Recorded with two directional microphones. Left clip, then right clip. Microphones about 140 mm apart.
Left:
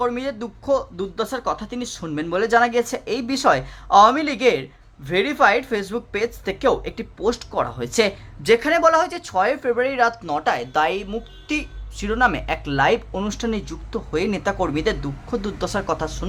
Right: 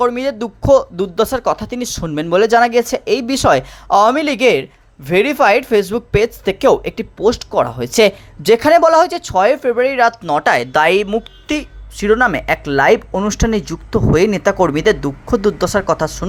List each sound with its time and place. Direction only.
0.0 s speech: 35° right (ahead or behind)
10.2 s speech: 45° right (ahead or behind)